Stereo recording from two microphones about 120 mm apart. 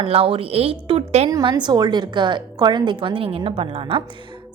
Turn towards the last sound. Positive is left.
turn(degrees=-50)  # may be behind; listen again after turning